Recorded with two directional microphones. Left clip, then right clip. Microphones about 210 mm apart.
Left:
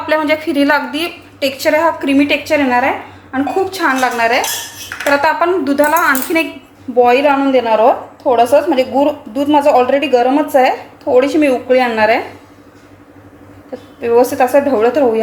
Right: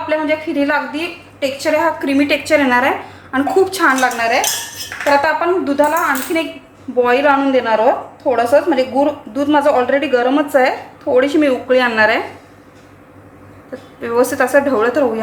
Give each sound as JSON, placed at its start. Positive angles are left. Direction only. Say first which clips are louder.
{"t": 0.1, "sound": "a woman's voice", "louder": "left 4 dB", "side_deg": 35}
{"t": 4.0, "sound": "a woman's voice", "louder": "left 2 dB", "side_deg": 5}
{"t": 5.6, "sound": "a woman's voice", "louder": "left 4 dB", "side_deg": 25}
{"t": 7.0, "sound": "a woman's voice", "louder": "left 2 dB", "side_deg": 5}
{"t": 14.0, "sound": "a woman's voice", "louder": "left 4 dB", "side_deg": 0}